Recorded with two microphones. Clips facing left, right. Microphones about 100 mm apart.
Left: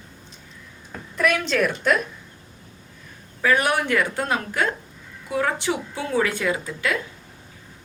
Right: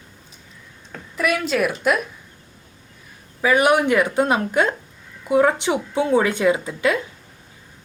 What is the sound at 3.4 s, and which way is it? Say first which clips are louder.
A woman's voice: right 4 dB; 15° right (ahead or behind).